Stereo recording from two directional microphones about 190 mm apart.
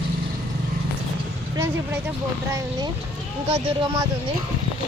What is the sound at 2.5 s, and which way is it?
Speech, 20° right (ahead or behind).